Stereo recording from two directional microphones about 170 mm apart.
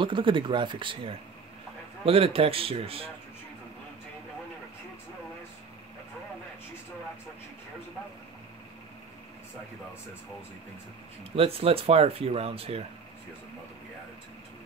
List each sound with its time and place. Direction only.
0.0 s speech: 30° right (ahead or behind)
11.3 s speech: 35° right (ahead or behind)